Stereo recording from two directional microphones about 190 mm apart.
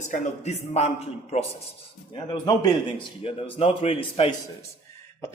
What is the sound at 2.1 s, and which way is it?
A man's voice, 25° left (ahead or behind).